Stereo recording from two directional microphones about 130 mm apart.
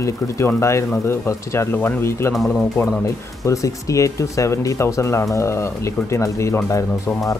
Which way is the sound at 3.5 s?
25° left (ahead or behind).